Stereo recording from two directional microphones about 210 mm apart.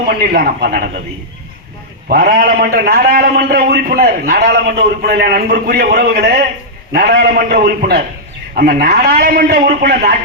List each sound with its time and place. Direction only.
0.3 s a man's voice: 45° right (ahead or behind)
2.0 s a man's voice: 45° right (ahead or behind)